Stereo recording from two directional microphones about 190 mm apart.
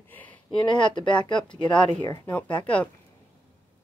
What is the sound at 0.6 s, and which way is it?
Speech, 25° left (ahead or behind).